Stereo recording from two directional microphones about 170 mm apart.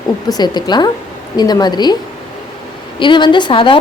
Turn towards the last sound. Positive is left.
turn(degrees=30)  # may be behind; listen again after turning